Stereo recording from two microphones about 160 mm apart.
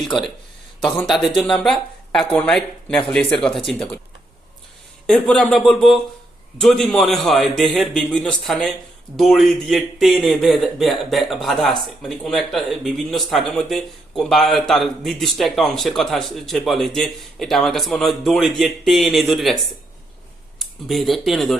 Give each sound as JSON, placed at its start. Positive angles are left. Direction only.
{"t": 0.8, "sound": "speech", "side_deg": 5}
{"t": 5.0, "sound": "speech", "side_deg": 5}